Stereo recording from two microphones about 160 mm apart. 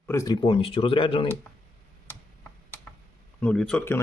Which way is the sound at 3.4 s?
5° left (ahead or behind).